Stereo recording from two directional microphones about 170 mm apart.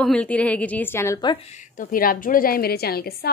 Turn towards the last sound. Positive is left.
turn(degrees=65)  # may be behind; listen again after turning